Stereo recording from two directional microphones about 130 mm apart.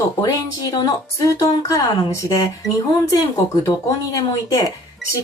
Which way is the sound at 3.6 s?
25° left (ahead or behind).